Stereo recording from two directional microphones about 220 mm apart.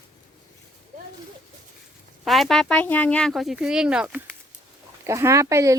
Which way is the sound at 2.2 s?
Centre (ahead or behind).